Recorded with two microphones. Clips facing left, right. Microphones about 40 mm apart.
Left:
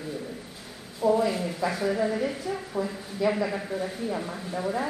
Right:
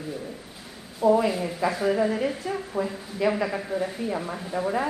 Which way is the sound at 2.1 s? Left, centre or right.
Right.